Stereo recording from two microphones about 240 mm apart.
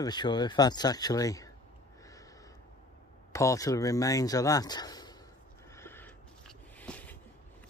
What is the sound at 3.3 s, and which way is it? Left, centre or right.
Speech, centre.